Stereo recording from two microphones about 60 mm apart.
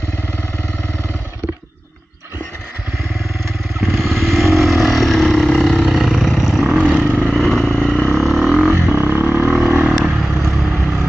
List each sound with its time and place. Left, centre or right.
3.8 s vehicle: centre
7.2 s vehicle: centre
8.9 s vehicle: right
10.0 s vehicle: centre